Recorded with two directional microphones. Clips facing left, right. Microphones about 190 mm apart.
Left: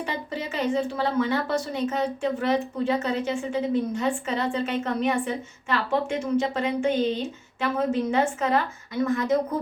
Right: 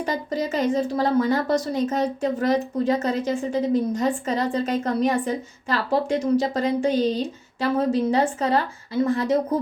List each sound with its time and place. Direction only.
0.0 s a woman's voice: 40° right (ahead or behind)